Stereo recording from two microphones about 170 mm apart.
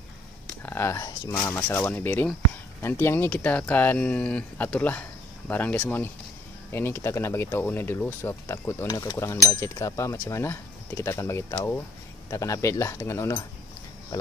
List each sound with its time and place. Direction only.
0.6 s speech: 15° left (ahead or behind)
1.3 s speech: 10° left (ahead or behind)